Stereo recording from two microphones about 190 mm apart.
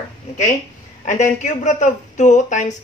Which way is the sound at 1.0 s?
40° left (ahead or behind).